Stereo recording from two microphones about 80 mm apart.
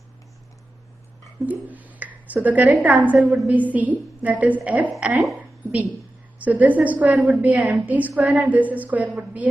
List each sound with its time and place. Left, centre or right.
1.4 s a woman's voice: centre
6.4 s a woman's voice: centre